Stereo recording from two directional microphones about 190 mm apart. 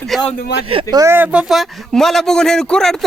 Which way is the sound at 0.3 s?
55° left (ahead or behind).